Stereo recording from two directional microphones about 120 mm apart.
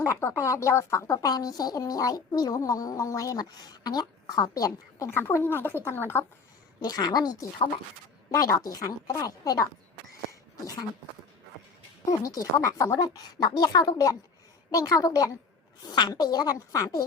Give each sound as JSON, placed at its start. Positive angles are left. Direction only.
{"t": 0.0, "sound": "speech", "side_deg": 20}
{"t": 6.7, "sound": "speech", "side_deg": 35}
{"t": 12.2, "sound": "speech", "side_deg": 30}